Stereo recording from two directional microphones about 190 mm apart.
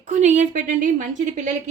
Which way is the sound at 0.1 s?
40° right (ahead or behind).